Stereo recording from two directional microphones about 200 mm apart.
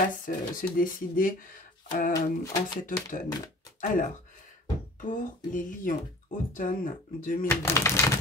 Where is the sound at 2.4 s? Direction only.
20° left (ahead or behind).